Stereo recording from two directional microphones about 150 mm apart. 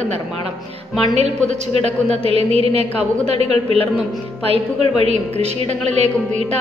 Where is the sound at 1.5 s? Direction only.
45° right (ahead or behind).